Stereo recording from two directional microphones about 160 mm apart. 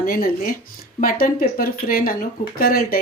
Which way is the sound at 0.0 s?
65° left (ahead or behind).